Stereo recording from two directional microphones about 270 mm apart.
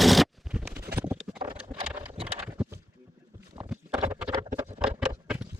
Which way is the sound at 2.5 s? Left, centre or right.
Centre.